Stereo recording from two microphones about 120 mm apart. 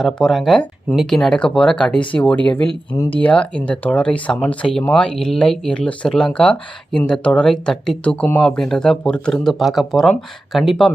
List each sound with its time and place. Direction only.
0.0 s speech: centre (ahead or behind)
2.9 s speech: 35° left (ahead or behind)
3.2 s speech: 10° left (ahead or behind)